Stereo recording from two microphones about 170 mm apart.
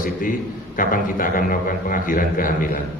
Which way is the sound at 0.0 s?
55° left (ahead or behind).